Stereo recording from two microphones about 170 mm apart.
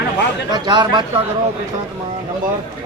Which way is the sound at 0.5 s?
25° right (ahead or behind).